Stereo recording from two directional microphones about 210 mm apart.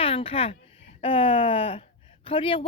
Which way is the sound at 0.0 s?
25° left (ahead or behind).